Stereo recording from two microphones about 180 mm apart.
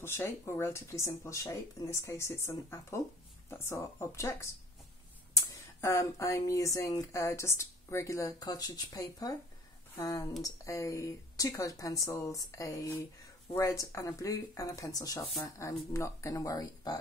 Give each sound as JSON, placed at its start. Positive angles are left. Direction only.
{"t": 0.0, "sound": "speech", "side_deg": 15}